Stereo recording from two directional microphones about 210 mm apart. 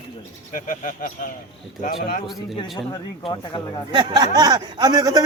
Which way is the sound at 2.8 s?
20° left (ahead or behind).